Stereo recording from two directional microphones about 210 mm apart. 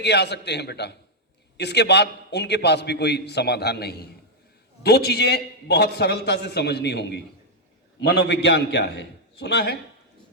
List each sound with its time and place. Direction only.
0.0 s a man's voice: 55° left (ahead or behind)